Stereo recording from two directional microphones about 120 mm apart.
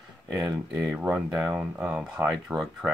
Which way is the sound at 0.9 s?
10° right (ahead or behind).